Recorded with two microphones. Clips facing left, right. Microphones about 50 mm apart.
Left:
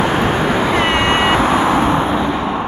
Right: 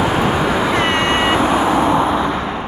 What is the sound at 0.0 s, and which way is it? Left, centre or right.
Cat, left.